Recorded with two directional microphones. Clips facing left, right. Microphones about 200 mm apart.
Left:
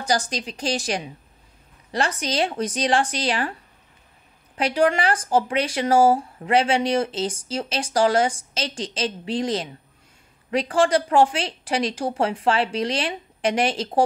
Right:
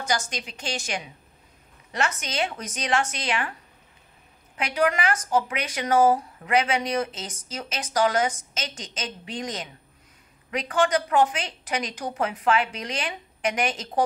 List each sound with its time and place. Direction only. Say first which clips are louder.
0.0 s speech: left 4 dB; 35° left (ahead or behind)
4.6 s speech: left 4 dB; 30° left (ahead or behind)